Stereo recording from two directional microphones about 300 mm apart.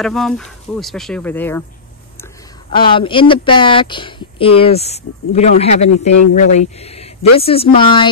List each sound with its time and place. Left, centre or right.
0.0 s speech: centre
2.7 s speech: centre